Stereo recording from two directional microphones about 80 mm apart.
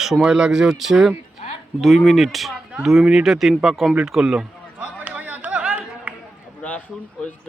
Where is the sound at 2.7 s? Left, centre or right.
Centre.